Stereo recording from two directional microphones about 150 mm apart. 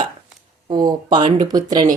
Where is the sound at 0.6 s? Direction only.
30° right (ahead or behind).